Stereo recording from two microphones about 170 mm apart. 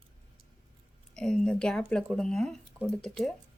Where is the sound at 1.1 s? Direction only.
5° left (ahead or behind).